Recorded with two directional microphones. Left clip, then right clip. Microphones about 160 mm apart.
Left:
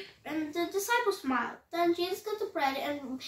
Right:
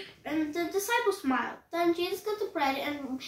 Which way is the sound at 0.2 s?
20° left (ahead or behind).